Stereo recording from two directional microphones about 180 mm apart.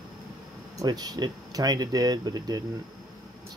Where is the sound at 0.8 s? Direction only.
20° right (ahead or behind).